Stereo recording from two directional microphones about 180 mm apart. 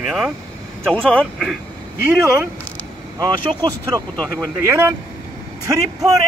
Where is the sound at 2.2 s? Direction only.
15° right (ahead or behind).